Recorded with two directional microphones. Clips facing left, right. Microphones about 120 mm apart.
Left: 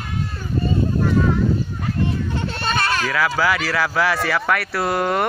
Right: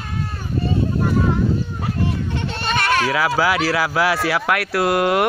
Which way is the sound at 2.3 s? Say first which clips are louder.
Right 1 dB; 35° left (ahead or behind).